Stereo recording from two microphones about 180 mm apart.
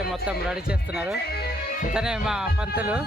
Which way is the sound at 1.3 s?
60° left (ahead or behind).